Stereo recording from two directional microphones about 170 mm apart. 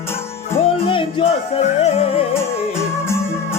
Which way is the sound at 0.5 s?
30° left (ahead or behind).